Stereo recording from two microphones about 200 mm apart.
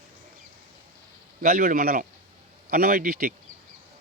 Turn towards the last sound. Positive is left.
turn(degrees=-45)  # may be behind; listen again after turning